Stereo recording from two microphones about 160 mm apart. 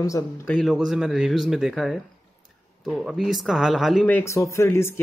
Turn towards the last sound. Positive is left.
turn(degrees=15)  # may be behind; listen again after turning